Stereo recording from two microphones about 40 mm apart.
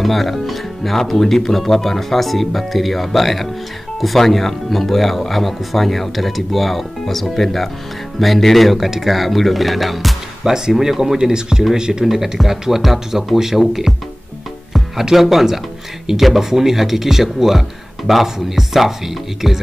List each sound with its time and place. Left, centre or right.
0.0 s speech: centre
10.4 s speech: centre
12.1 s speech: centre
15.1 s speech: centre